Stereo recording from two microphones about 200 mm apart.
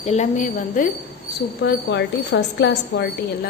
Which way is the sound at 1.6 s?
60° left (ahead or behind).